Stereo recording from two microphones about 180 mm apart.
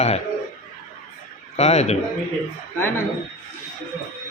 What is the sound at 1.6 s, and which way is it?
Speech, 35° left (ahead or behind).